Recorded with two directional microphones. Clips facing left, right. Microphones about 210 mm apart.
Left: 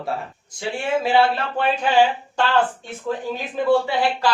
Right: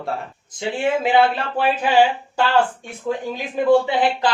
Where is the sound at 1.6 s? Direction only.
10° right (ahead or behind).